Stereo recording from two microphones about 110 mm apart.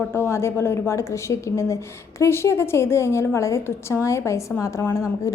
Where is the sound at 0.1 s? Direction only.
25° left (ahead or behind).